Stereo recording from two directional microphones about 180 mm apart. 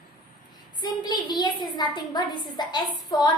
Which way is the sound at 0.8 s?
25° left (ahead or behind).